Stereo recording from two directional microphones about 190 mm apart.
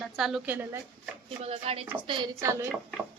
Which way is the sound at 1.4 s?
30° right (ahead or behind).